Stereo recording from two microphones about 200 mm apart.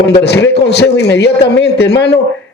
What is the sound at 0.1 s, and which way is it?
A man's voice, 55° left (ahead or behind).